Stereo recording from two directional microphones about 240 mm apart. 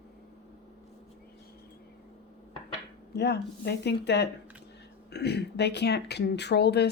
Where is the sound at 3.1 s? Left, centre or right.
Left.